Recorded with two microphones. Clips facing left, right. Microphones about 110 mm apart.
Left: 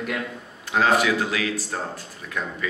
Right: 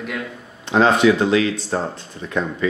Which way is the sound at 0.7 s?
25° right (ahead or behind).